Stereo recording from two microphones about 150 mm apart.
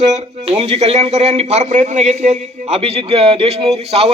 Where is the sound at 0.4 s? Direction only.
40° right (ahead or behind).